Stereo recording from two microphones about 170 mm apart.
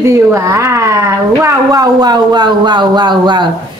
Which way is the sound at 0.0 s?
15° right (ahead or behind).